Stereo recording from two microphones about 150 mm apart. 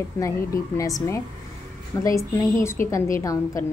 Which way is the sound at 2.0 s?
15° left (ahead or behind).